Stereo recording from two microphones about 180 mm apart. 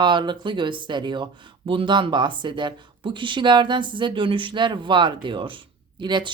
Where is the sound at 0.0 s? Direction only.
25° right (ahead or behind).